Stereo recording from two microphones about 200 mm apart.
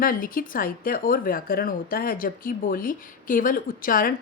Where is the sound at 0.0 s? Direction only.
45° left (ahead or behind).